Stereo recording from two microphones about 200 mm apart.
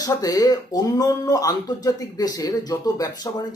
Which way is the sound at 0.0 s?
20° left (ahead or behind).